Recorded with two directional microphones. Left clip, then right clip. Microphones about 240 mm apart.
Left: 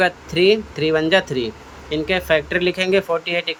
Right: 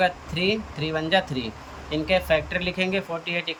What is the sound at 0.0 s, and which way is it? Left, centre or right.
Speech, centre.